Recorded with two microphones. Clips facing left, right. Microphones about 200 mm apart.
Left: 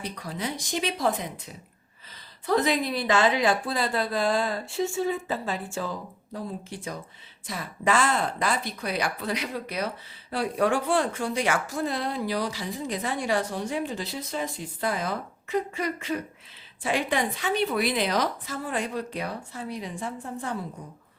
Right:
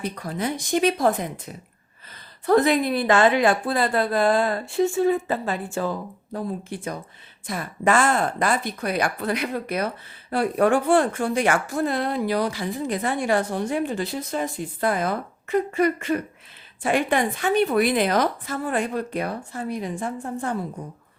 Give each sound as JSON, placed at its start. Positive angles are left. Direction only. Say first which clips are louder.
{"t": 0.0, "sound": "speech", "louder": "right 5 dB", "side_deg": -50}
{"t": 2.5, "sound": "a woman's voice", "louder": "right 6 dB", "side_deg": -55}